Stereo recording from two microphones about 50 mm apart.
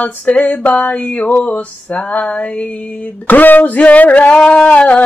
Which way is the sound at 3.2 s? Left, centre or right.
Left.